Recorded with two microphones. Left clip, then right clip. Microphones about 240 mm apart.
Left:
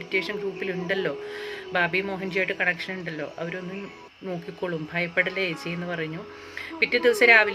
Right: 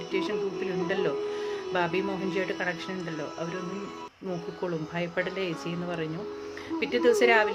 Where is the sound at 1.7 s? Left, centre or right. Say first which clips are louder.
Left 5 dB; centre.